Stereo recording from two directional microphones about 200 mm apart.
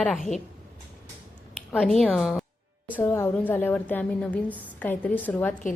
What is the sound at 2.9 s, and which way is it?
A woman's voice, 10° left (ahead or behind).